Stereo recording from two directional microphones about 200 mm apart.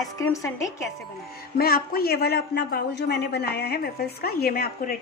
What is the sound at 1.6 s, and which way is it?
A man's voice, 50° left (ahead or behind).